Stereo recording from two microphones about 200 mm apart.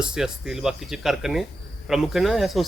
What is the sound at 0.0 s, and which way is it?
A man's voice, 5° right (ahead or behind).